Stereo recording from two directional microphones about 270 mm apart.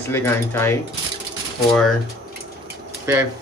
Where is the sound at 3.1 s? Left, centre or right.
Centre.